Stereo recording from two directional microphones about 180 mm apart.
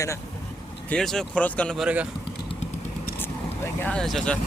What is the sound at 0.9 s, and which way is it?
Speech, 5° left (ahead or behind).